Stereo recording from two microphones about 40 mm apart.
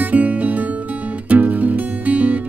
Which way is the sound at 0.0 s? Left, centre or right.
Right.